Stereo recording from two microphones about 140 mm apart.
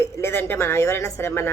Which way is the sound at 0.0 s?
15° left (ahead or behind).